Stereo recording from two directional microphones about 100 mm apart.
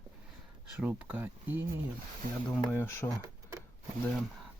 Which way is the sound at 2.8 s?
25° left (ahead or behind).